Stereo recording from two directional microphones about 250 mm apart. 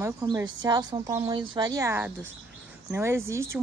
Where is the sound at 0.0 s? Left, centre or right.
Centre.